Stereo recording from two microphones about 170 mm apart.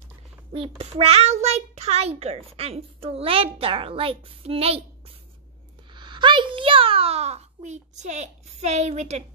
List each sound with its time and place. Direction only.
0.5 s a child's voice: 35° right (ahead or behind)
5.9 s a child's voice: 25° right (ahead or behind)